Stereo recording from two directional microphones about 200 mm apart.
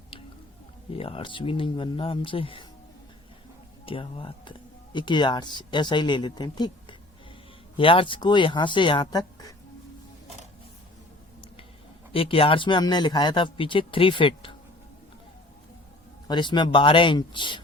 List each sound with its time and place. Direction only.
0.9 s speech: 30° left (ahead or behind)
3.8 s speech: 25° left (ahead or behind)
12.1 s speech: 30° left (ahead or behind)
16.2 s speech: 20° left (ahead or behind)